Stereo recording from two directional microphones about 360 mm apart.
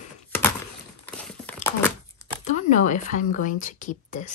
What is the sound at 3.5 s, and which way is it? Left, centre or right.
Speech, left.